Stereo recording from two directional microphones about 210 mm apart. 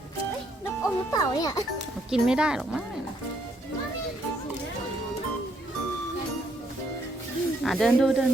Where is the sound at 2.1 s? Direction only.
5° right (ahead or behind).